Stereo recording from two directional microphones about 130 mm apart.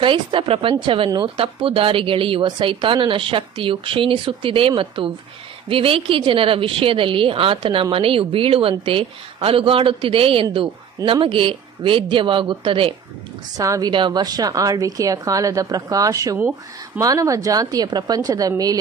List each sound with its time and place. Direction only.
0.0 s a woman's voice: 40° right (ahead or behind)
13.6 s a woman's voice: 30° right (ahead or behind)
16.3 s speech: 10° right (ahead or behind)
17.0 s a woman's voice: 25° right (ahead or behind)